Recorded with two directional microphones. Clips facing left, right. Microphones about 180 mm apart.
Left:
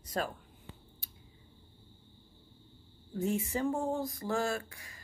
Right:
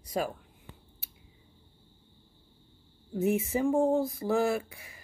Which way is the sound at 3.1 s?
15° right (ahead or behind).